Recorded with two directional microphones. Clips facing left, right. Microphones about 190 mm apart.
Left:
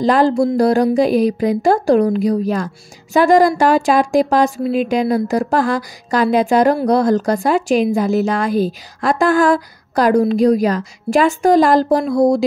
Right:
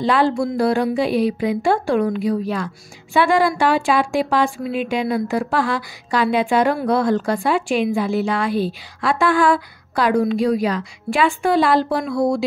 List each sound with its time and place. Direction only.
0.0 s speech: 40° left (ahead or behind)